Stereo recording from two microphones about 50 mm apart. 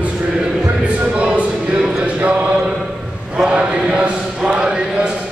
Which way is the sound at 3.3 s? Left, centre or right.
Right.